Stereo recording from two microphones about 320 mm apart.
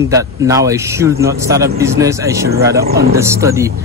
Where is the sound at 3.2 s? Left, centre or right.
Centre.